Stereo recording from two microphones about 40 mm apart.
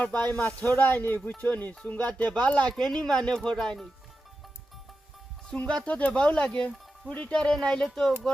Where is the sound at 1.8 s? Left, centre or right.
Left.